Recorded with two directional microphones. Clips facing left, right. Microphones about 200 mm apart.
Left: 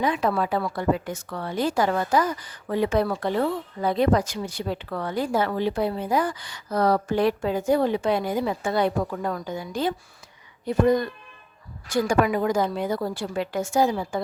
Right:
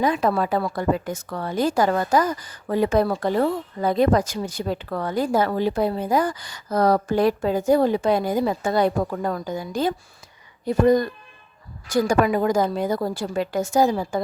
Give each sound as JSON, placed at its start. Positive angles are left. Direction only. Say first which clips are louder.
{"t": 0.0, "sound": "a woman's voice", "louder": "right 3 dB", "side_deg": -45}